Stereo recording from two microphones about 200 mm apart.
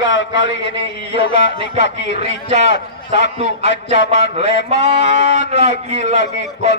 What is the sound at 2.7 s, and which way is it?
A man's voice, 60° left (ahead or behind).